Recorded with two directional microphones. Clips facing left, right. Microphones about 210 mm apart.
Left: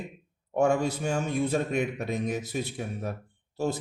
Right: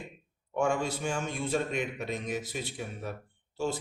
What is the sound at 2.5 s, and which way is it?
Speech, 45° left (ahead or behind).